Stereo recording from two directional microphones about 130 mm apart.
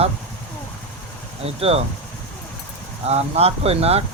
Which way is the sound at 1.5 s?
50° right (ahead or behind).